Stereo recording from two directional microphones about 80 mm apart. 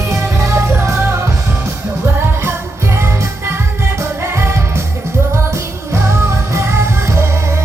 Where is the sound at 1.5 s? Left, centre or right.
Right.